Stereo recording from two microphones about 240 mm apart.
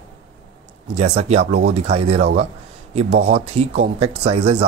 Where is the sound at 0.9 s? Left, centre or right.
Right.